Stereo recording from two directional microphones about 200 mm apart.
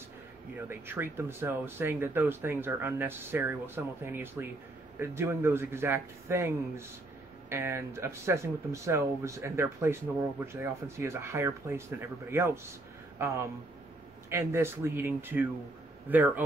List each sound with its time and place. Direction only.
0.7 s speech: 10° right (ahead or behind)